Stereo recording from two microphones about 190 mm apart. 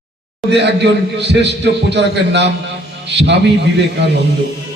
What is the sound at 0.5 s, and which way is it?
A man's voice, 60° right (ahead or behind).